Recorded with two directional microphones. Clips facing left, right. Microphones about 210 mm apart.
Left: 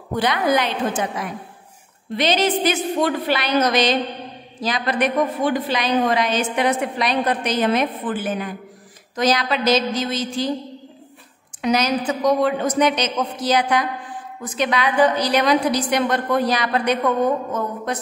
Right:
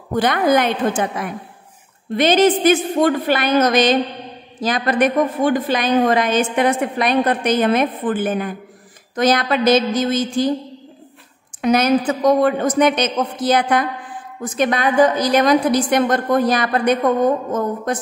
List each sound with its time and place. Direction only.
0.1 s a woman's voice: 50° right (ahead or behind)
11.6 s a woman's voice: 55° right (ahead or behind)